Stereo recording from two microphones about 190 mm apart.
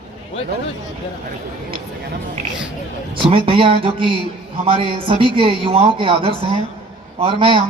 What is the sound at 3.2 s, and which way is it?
Speech, 30° right (ahead or behind).